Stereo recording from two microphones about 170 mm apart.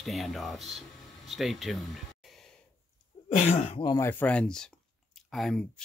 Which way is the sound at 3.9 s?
15° left (ahead or behind).